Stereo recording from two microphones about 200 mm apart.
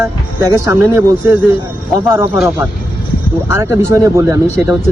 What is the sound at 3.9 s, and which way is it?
Speech, 15° right (ahead or behind).